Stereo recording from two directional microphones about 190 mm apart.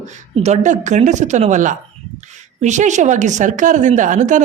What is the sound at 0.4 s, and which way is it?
A woman's voice, 40° right (ahead or behind).